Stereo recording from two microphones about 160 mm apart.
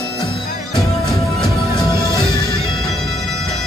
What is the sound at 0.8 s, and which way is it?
Music, 20° left (ahead or behind).